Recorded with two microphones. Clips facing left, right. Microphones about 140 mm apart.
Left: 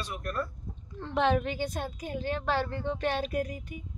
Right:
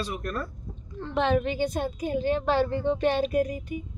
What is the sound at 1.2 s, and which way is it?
A woman's voice, 5° left (ahead or behind).